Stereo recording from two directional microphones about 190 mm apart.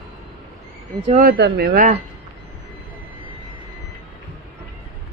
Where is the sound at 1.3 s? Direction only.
60° right (ahead or behind).